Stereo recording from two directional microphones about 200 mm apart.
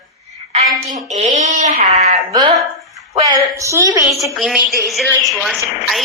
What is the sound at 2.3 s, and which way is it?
A woman's voice, 20° right (ahead or behind).